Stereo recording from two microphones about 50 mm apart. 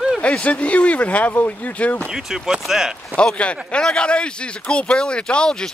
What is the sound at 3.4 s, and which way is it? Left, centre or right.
Speech, left.